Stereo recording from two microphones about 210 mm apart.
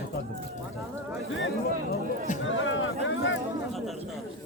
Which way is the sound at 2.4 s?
65° left (ahead or behind).